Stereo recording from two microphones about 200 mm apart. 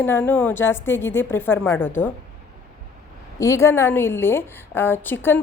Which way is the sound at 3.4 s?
15° left (ahead or behind).